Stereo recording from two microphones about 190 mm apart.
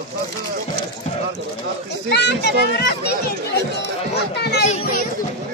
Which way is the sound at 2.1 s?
60° left (ahead or behind).